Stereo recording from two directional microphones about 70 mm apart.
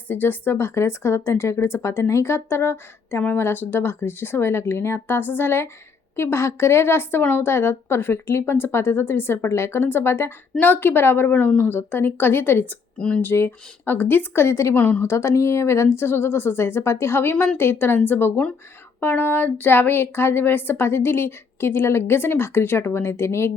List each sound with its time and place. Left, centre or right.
0.1 s speech: left
11.4 s a woman's voice: left
11.8 s a woman's voice: left
13.0 s speech: centre
13.2 s speech: left
14.8 s a woman's voice: left
15.0 s speech: left